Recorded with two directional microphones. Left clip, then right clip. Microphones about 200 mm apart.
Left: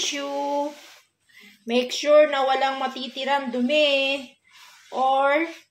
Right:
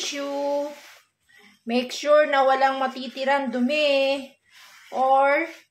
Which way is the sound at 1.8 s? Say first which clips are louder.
Left 2 dB; 15° right (ahead or behind).